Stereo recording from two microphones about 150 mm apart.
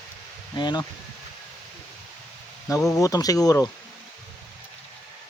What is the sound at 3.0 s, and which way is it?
Speech, 25° left (ahead or behind).